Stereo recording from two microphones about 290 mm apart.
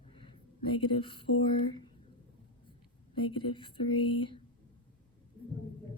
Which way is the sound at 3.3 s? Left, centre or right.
Centre.